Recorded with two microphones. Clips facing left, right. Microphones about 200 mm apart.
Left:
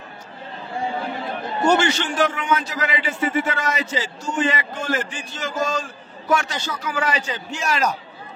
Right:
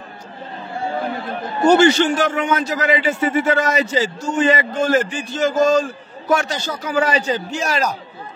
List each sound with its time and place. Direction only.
1.7 s a man's voice: 40° right (ahead or behind)